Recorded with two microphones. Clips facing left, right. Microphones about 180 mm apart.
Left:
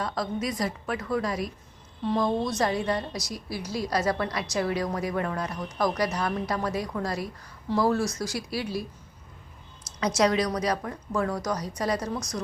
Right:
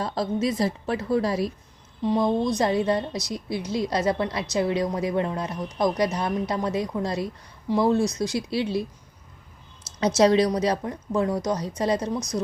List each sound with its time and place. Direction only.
0.0 s a woman's voice: 30° right (ahead or behind)
2.0 s a woman's voice: 20° right (ahead or behind)
10.2 s a woman's voice: 30° right (ahead or behind)